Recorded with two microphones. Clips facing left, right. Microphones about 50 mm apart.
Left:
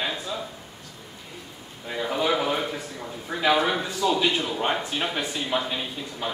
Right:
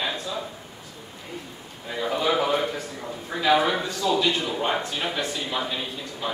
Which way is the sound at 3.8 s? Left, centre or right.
Centre.